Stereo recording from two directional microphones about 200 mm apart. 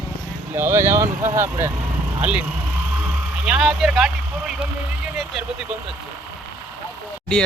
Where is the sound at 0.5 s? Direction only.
10° right (ahead or behind).